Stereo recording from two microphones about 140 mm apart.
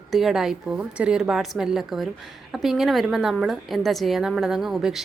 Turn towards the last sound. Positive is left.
turn(degrees=0)  # may be behind; listen again after turning